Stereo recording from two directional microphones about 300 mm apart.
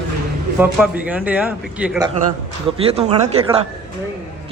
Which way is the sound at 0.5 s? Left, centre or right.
Centre.